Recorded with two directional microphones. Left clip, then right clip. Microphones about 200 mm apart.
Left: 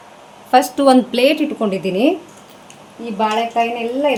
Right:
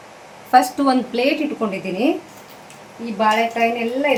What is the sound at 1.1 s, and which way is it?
Speech, 60° left (ahead or behind).